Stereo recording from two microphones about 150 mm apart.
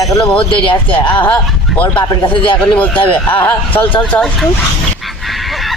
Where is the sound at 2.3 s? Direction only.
35° left (ahead or behind).